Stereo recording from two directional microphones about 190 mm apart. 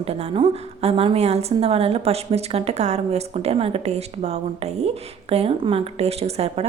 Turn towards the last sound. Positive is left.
turn(degrees=-35)  # may be behind; listen again after turning